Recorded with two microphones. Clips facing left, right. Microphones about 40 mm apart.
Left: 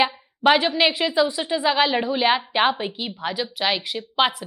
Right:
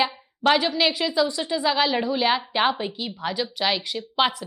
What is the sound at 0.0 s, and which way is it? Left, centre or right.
A woman's voice, centre.